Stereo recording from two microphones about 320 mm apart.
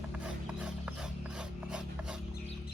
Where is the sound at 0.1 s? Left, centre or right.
Centre.